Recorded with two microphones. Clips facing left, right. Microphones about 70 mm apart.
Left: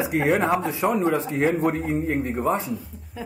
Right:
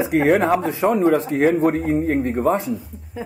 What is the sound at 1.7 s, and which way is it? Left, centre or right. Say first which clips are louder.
A man's voice: right 5 dB; centre.